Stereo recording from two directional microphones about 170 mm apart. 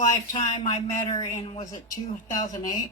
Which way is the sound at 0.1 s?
25° left (ahead or behind).